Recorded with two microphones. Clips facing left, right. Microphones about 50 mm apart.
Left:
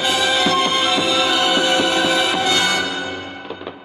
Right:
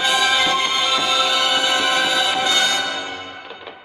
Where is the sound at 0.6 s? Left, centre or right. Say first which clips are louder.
Left 2 dB; left.